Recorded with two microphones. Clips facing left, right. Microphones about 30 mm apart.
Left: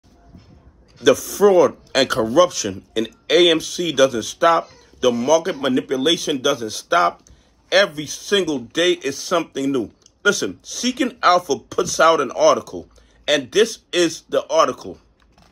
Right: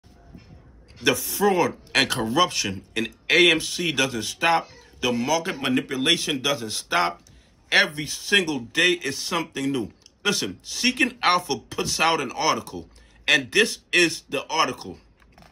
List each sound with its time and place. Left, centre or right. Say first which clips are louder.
0.9 s speech: left 7 dB; right